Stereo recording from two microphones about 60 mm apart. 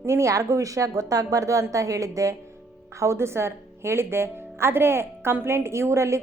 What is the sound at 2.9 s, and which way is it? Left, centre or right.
A woman's voice, right.